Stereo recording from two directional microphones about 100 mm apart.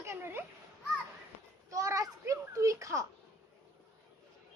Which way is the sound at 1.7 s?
35° right (ahead or behind).